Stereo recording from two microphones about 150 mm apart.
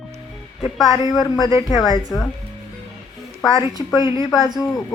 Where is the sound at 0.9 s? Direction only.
25° left (ahead or behind).